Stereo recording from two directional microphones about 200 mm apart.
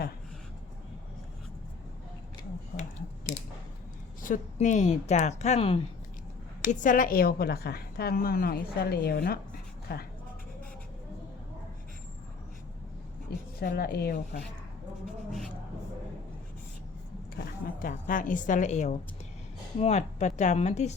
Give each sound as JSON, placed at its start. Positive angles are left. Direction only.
{"t": 4.2, "sound": "a woman's voice", "side_deg": 40}
{"t": 6.6, "sound": "a woman's voice", "side_deg": 40}
{"t": 13.6, "sound": "a woman's voice", "side_deg": 50}
{"t": 15.0, "sound": "a sound", "side_deg": 0}
{"t": 17.3, "sound": "a woman's voice", "side_deg": 45}